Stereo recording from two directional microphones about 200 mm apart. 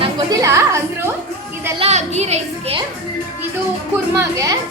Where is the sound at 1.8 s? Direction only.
35° right (ahead or behind).